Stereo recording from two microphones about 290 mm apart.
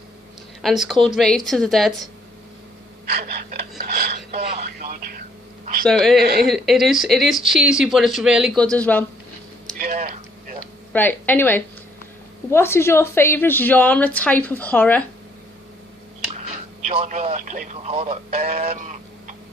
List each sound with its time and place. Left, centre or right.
0.6 s speech: centre
3.1 s a sound: right
5.8 s speech: centre
6.2 s speech: right
6.5 s speech: centre
9.7 s a sound: right
10.9 s a woman's voice: centre
16.8 s speech: right